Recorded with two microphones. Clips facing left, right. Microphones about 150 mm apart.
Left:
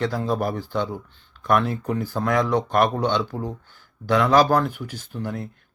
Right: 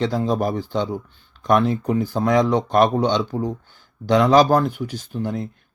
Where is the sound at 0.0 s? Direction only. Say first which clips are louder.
Right 3 dB; 20° right (ahead or behind).